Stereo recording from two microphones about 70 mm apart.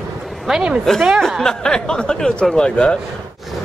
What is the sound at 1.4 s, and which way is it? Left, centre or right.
Speech, centre.